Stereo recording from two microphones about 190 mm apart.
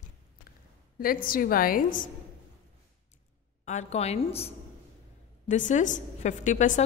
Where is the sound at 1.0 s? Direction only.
50° left (ahead or behind).